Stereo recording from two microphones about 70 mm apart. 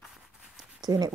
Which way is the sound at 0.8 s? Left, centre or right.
Right.